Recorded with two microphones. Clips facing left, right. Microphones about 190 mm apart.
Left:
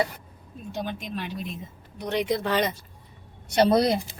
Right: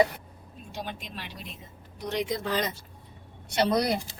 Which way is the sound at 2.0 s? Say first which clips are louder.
Left 4 dB; 65° left (ahead or behind).